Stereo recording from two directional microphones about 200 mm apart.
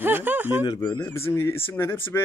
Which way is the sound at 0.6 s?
20° left (ahead or behind).